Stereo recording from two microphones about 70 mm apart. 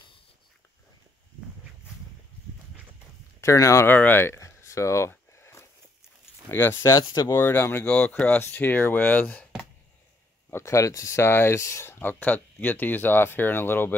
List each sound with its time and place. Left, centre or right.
3.3 s speech: left
3.8 s speech: left
4.4 s a sound: left
6.5 s speech: left
6.9 s speech: left
7.2 s speech: left
7.8 s speech: left
10.5 s speech: left
12.0 s speech: left